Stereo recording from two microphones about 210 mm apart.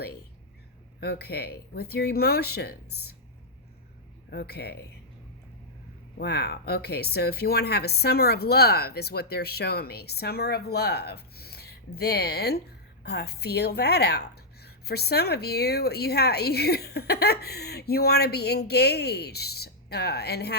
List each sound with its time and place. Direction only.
0.9 s a woman's voice: 50° left (ahead or behind)
4.3 s a woman's voice: 50° left (ahead or behind)
6.1 s a woman's voice: 50° left (ahead or behind)